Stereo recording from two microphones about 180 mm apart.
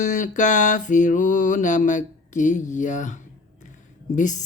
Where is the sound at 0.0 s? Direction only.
45° left (ahead or behind).